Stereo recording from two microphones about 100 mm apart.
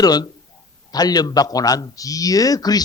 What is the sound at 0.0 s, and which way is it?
A man's voice, 40° left (ahead or behind).